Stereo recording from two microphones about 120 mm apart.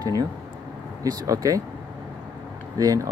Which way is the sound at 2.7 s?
30° right (ahead or behind).